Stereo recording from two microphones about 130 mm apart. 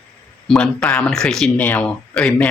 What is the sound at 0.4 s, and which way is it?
Speech, 5° left (ahead or behind).